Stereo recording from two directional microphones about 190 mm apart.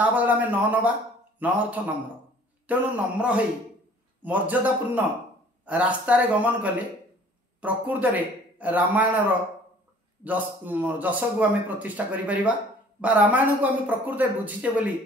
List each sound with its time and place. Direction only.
0.0 s a man's voice: 10° right (ahead or behind)
10.2 s a man's voice: 10° right (ahead or behind)